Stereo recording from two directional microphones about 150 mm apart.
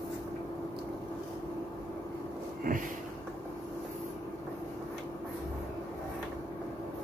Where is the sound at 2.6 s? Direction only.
70° right (ahead or behind).